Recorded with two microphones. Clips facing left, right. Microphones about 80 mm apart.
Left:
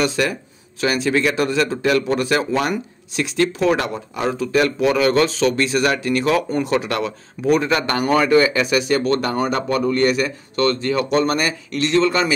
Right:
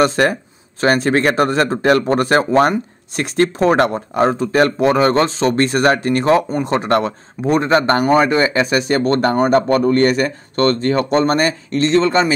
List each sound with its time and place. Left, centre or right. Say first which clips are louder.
0.0 s speech: right 6 dB; right
8.0 s speech: right 2 dB; right